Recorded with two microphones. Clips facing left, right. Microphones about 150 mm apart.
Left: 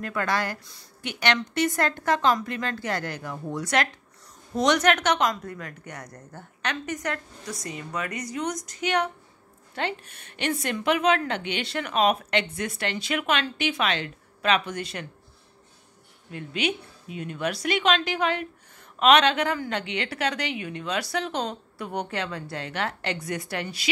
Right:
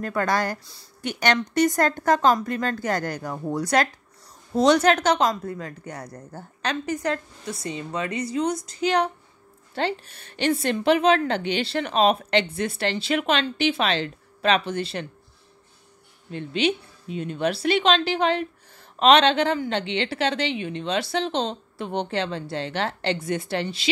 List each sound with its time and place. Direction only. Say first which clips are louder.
0.0 s a woman's voice: right 3 dB; 40° right (ahead or behind)
16.3 s speech: right 5 dB; 30° right (ahead or behind)